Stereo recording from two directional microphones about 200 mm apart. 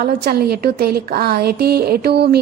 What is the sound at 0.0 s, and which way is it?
A woman's voice, 50° right (ahead or behind).